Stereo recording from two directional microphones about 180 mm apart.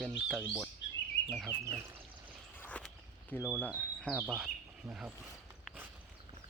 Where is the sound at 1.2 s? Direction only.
Centre (ahead or behind).